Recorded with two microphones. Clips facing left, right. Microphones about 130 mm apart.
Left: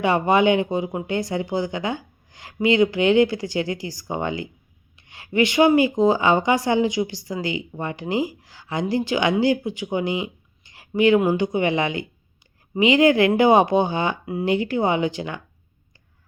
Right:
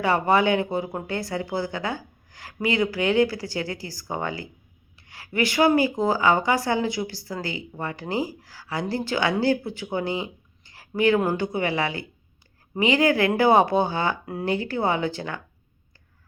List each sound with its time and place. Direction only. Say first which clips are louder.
0.0 s speech: left 3 dB; 20° left (ahead or behind)